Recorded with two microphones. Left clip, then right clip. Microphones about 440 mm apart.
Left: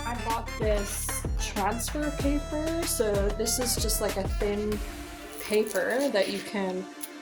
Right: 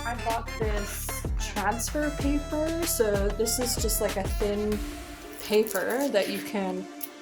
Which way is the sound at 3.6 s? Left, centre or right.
Right.